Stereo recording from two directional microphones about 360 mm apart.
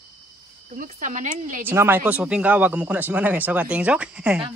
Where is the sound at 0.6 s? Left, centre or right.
Right.